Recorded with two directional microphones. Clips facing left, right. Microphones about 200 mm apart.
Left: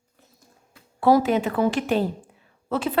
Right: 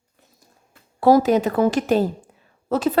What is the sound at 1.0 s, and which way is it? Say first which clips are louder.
Speech: right 3 dB; 40° right (ahead or behind).